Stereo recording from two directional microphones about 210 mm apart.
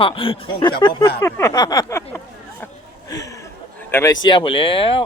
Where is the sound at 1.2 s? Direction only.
15° left (ahead or behind).